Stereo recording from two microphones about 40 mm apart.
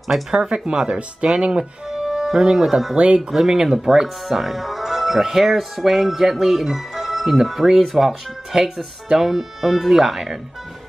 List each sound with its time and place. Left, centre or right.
0.3 s speech: centre
2.0 s music: centre
3.2 s speech: centre